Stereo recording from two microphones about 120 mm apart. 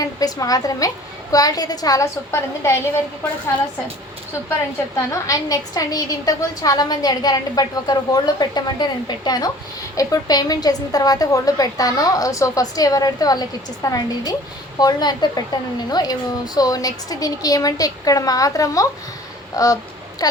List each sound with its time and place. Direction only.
0.0 s a woman's voice: 30° left (ahead or behind)
4.9 s a woman's voice: 25° left (ahead or behind)
19.6 s a sound: 30° left (ahead or behind)